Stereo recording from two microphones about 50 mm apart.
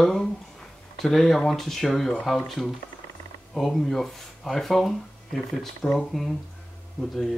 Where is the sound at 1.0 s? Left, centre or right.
Centre.